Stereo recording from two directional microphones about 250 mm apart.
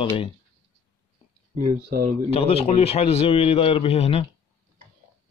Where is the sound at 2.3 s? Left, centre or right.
Left.